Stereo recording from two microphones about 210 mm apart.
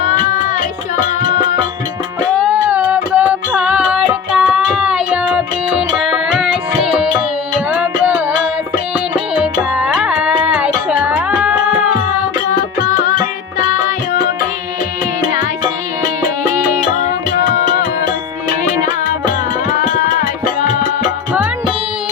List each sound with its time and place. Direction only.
2.3 s music: 5° right (ahead or behind)
12.5 s music: 35° left (ahead or behind)
17.6 s music: 35° left (ahead or behind)
19.9 s music: 35° left (ahead or behind)